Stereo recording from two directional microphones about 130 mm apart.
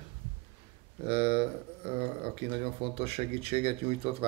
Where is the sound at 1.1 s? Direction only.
50° right (ahead or behind).